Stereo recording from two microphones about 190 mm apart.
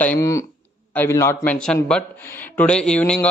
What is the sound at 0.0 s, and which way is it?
A man's voice, 10° left (ahead or behind).